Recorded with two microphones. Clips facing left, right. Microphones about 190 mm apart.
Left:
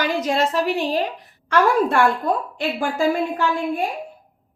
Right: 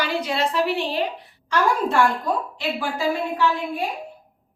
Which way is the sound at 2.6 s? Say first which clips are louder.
Left 4 dB; 50° left (ahead or behind).